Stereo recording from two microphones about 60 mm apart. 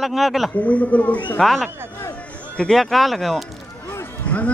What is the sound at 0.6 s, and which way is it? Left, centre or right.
Speech, left.